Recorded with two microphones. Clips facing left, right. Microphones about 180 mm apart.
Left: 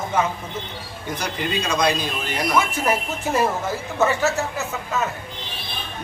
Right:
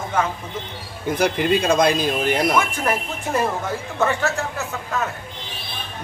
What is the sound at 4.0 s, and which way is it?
Speech, 5° left (ahead or behind).